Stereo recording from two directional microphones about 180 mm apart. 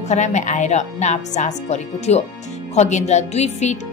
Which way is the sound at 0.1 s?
40° left (ahead or behind).